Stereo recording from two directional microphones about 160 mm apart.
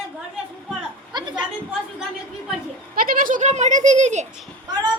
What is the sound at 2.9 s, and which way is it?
Speech, 60° right (ahead or behind).